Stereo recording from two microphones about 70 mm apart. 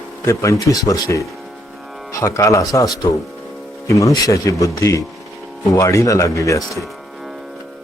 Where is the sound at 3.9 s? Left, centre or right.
Left.